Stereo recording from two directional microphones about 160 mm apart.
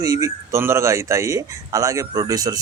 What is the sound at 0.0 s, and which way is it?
Speech, 20° right (ahead or behind).